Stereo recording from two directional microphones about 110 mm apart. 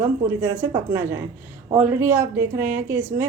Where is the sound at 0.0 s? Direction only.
25° right (ahead or behind).